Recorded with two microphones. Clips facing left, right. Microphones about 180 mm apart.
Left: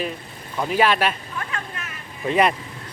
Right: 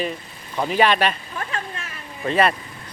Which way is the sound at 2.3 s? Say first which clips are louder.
Even; 15° left (ahead or behind).